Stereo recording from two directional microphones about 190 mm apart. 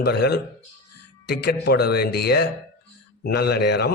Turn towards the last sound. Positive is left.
turn(degrees=60)  # may be behind; listen again after turning